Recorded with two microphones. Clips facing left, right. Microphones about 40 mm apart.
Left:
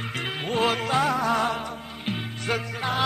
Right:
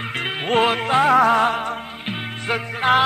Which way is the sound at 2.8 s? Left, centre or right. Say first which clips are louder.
Right 13 dB; right.